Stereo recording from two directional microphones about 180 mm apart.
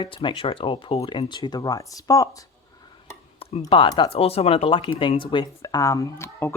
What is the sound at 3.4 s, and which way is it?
Speech, 30° left (ahead or behind).